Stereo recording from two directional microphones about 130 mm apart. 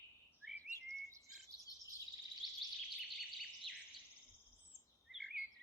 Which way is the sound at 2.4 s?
Centre (ahead or behind).